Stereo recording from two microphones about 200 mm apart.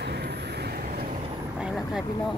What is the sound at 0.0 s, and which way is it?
Vehicle, 55° right (ahead or behind).